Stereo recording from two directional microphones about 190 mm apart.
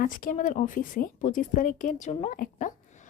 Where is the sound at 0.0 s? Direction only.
45° left (ahead or behind).